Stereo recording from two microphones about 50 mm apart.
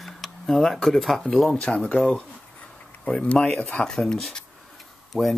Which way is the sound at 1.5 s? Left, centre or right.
Left.